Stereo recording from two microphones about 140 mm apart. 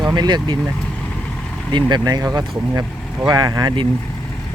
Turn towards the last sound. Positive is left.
turn(degrees=-30)  # may be behind; listen again after turning